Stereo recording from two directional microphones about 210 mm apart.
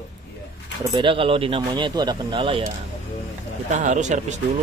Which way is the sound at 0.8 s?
20° right (ahead or behind).